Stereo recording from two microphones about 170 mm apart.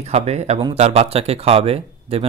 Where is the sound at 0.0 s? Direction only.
40° right (ahead or behind).